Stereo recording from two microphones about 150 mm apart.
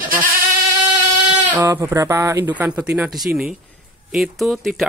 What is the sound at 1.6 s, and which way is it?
Speech, 20° right (ahead or behind).